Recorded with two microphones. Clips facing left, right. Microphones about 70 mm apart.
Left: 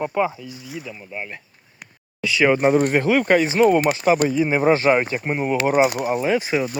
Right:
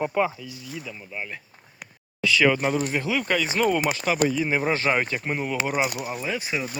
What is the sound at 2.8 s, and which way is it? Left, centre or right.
Speech, left.